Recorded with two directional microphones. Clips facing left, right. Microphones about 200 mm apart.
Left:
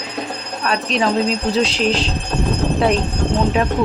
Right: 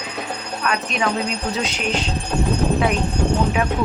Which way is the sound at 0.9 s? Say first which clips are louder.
Left 9 dB; 35° left (ahead or behind).